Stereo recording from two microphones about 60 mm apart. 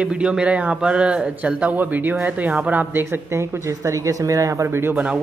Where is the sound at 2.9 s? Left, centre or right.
Right.